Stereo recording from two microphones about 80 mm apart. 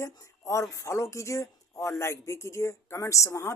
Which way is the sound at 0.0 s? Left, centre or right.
Left.